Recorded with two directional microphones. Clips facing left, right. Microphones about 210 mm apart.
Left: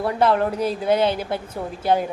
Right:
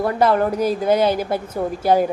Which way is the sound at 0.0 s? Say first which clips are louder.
Right 2 dB; centre (ahead or behind).